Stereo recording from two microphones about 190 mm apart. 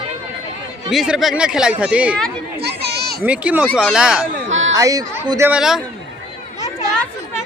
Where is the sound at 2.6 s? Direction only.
60° right (ahead or behind).